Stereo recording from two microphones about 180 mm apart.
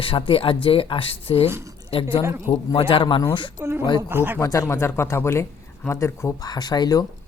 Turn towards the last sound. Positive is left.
turn(degrees=20)  # may be behind; listen again after turning